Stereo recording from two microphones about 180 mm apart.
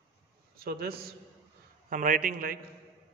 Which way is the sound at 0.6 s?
60° right (ahead or behind).